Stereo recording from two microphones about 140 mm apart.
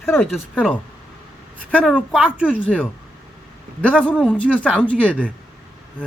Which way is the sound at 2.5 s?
10° left (ahead or behind).